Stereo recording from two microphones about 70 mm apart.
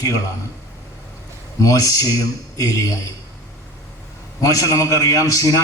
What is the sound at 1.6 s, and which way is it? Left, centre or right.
Speech, left.